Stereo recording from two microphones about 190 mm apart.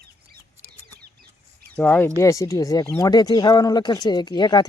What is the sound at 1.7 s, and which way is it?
Speech, 10° left (ahead or behind).